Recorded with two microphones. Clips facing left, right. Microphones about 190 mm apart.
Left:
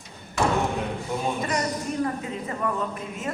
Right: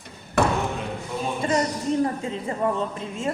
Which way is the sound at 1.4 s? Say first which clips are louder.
Right 4 dB; 30° right (ahead or behind).